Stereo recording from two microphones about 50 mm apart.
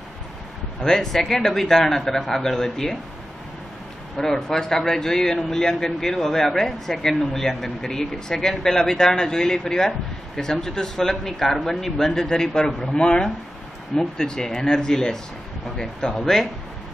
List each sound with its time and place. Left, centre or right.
0.7 s a man's voice: centre
4.2 s a man's voice: centre
16.2 s speech: centre